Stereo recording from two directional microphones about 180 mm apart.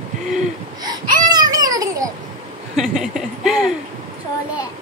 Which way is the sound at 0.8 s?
20° right (ahead or behind).